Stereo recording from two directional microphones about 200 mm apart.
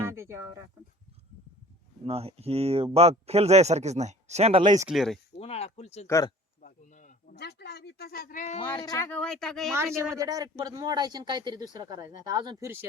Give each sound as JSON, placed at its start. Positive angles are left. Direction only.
{"t": 0.0, "sound": "speech", "side_deg": -15}
{"t": 2.0, "sound": "speech", "side_deg": -30}
{"t": 4.8, "sound": "speech", "side_deg": 0}
{"t": 5.4, "sound": "speech", "side_deg": 30}
{"t": 6.1, "sound": "speech", "side_deg": 15}
{"t": 6.6, "sound": "a sound", "side_deg": 40}
{"t": 7.3, "sound": "speech", "side_deg": 55}
{"t": 8.8, "sound": "speech", "side_deg": 20}
{"t": 9.0, "sound": "speech", "side_deg": 5}
{"t": 9.7, "sound": "speech", "side_deg": -15}